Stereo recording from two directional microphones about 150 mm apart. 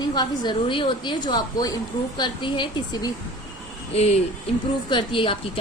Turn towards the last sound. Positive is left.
turn(degrees=35)  # may be behind; listen again after turning